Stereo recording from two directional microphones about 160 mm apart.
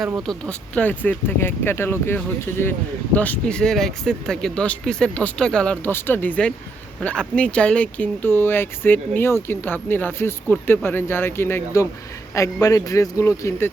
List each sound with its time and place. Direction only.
0.0 s speech: centre (ahead or behind); by 13.7 s 20° left (ahead or behind)